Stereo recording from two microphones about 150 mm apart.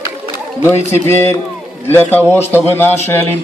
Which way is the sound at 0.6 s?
15° left (ahead or behind).